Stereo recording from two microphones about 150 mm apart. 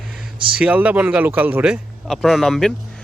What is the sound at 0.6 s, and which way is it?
A man's voice, 10° right (ahead or behind).